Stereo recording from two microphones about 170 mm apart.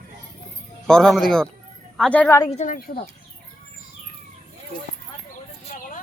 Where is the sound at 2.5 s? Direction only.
45° left (ahead or behind).